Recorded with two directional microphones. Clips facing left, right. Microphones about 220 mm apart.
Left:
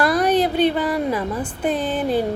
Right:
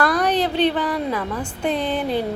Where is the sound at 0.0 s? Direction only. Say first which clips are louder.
Left 2 dB; 5° left (ahead or behind).